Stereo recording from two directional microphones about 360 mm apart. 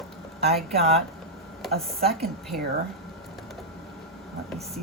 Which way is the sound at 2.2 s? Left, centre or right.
Centre.